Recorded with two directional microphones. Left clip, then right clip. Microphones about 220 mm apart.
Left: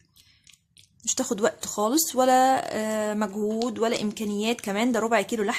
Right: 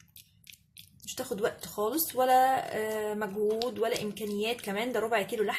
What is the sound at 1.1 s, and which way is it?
Speech, 40° left (ahead or behind).